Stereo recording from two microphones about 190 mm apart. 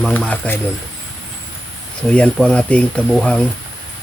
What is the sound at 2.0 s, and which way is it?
Speech, 5° left (ahead or behind).